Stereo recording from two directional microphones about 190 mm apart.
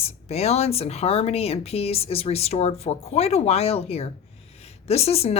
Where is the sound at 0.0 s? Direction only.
35° left (ahead or behind).